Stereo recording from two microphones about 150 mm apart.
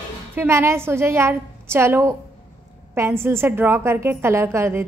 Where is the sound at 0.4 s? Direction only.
15° right (ahead or behind).